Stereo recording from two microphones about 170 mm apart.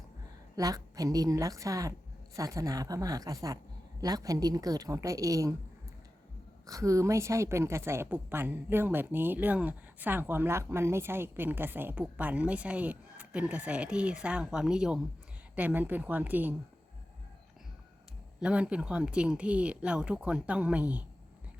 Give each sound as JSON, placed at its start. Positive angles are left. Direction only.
{"t": 0.5, "sound": "a woman's voice", "side_deg": -20}
{"t": 6.7, "sound": "a woman's voice", "side_deg": -20}
{"t": 18.3, "sound": "a woman's voice", "side_deg": -5}